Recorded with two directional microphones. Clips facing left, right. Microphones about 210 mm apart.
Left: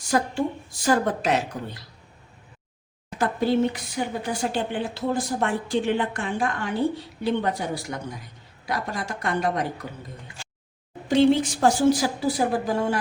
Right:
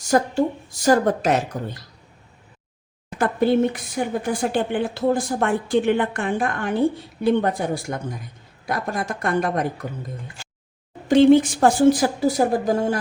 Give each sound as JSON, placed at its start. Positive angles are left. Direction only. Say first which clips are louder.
{"t": 0.0, "sound": "a woman's voice", "louder": "right 5 dB", "side_deg": -40}
{"t": 3.2, "sound": "a woman's voice", "louder": "right 3 dB", "side_deg": -55}
{"t": 11.1, "sound": "a woman's voice", "louder": "right 5 dB", "side_deg": -50}